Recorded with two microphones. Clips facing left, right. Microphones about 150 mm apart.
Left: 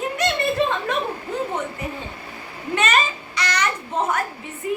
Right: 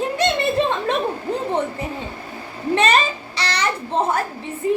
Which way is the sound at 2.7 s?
30° right (ahead or behind).